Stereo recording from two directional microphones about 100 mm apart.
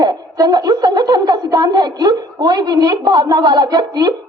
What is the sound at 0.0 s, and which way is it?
A woman's voice, 40° right (ahead or behind).